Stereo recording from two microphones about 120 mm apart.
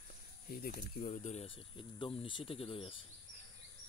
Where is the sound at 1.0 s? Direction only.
90° left.